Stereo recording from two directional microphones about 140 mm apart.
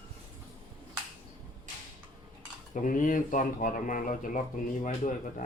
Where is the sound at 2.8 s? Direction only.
70° left (ahead or behind).